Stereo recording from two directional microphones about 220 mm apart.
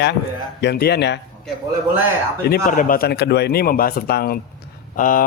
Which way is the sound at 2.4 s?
40° left (ahead or behind).